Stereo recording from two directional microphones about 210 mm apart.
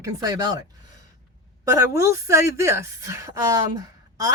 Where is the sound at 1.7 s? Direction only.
15° right (ahead or behind).